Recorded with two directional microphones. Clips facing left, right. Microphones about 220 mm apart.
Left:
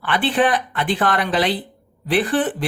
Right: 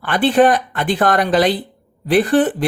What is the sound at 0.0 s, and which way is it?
A woman's voice, 45° right (ahead or behind).